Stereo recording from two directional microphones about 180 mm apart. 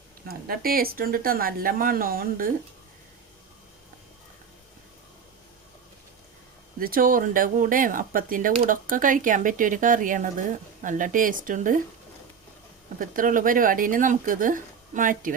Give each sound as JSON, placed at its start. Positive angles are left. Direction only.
{"t": 0.3, "sound": "speech", "side_deg": -55}
{"t": 6.7, "sound": "speech", "side_deg": -50}
{"t": 13.0, "sound": "speech", "side_deg": -50}